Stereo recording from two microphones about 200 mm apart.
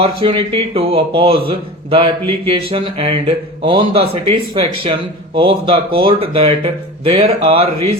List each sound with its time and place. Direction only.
0.0 s speech: 25° right (ahead or behind)